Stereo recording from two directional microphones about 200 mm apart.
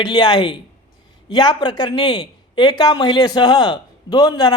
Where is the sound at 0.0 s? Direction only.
20° left (ahead or behind).